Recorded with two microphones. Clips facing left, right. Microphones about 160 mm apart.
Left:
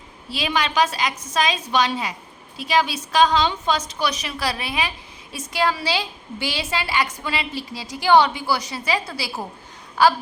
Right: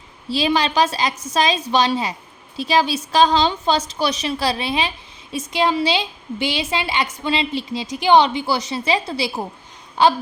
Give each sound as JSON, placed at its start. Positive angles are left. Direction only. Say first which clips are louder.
{"t": 0.3, "sound": "a woman's voice", "louder": "right 5 dB", "side_deg": -30}